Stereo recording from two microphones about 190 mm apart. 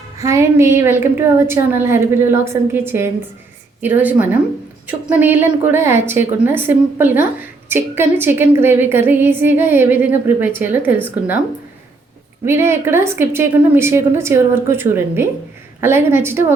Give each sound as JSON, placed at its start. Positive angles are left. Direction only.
{"t": 0.2, "sound": "a woman's voice", "side_deg": -15}
{"t": 12.5, "sound": "a woman's voice", "side_deg": -15}